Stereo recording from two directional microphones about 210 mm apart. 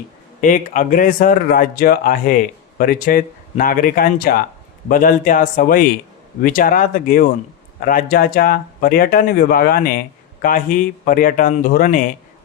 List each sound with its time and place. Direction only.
0.4 s speech: 40° left (ahead or behind)